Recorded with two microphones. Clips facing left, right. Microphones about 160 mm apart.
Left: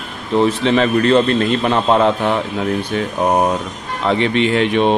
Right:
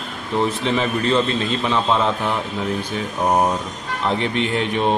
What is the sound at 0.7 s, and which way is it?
A man's voice, 70° left (ahead or behind).